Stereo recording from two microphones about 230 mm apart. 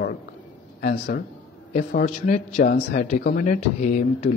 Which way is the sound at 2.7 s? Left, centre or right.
Left.